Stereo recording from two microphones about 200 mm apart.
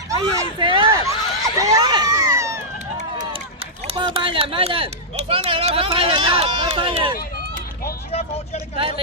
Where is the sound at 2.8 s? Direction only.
40° right (ahead or behind).